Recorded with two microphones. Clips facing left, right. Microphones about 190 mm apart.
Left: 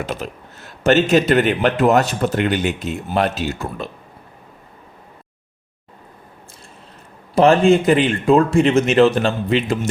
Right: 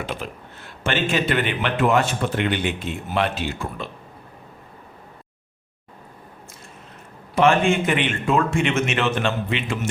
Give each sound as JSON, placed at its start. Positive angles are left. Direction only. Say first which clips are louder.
{"t": 0.0, "sound": "speech", "louder": "left 4 dB", "side_deg": 40}
{"t": 7.3, "sound": "speech", "louder": "left 5 dB", "side_deg": 35}